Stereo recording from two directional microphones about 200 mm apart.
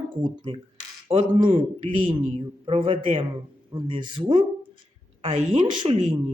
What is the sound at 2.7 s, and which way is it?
Speech, 25° right (ahead or behind).